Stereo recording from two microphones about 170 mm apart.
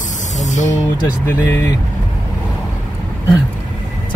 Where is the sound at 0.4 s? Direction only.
45° left (ahead or behind).